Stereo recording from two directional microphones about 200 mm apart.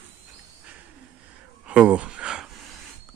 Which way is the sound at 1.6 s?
5° right (ahead or behind).